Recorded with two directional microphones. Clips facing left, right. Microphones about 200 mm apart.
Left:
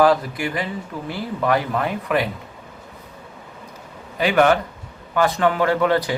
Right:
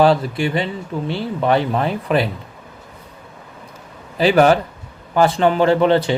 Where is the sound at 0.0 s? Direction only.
30° right (ahead or behind).